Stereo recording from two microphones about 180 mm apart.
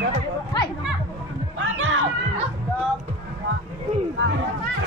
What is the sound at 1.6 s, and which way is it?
Music, 90° right.